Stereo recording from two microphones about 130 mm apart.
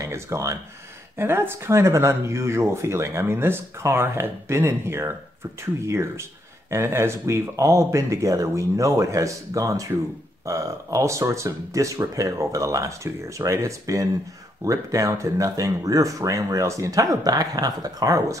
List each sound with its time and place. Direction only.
0.0 s speech: 20° right (ahead or behind)